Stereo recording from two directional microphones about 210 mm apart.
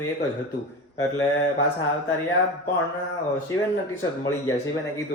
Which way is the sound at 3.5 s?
15° left (ahead or behind).